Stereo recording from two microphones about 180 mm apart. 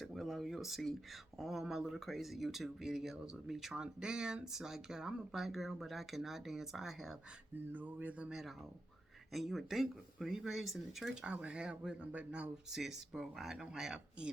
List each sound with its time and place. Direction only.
0.0 s speech: centre (ahead or behind)